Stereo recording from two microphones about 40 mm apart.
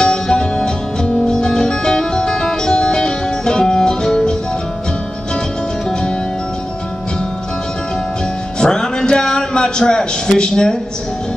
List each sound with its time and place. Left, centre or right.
0.0 s music: left
5.9 s music: centre
8.5 s a sound: centre